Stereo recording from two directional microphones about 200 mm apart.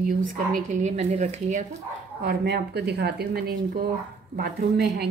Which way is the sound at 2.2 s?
55° right (ahead or behind).